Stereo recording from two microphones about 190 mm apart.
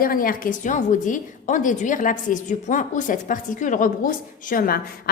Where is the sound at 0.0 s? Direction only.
50° left (ahead or behind).